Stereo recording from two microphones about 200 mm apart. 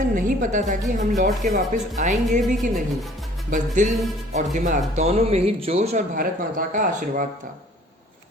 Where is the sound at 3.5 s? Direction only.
40° right (ahead or behind).